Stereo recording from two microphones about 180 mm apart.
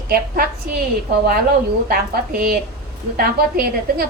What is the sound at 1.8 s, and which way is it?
A woman's voice, 55° right (ahead or behind).